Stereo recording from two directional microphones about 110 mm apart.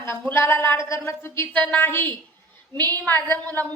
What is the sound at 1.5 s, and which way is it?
A woman's voice, 15° left (ahead or behind).